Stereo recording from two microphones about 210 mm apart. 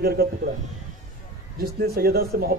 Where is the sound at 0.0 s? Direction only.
45° right (ahead or behind).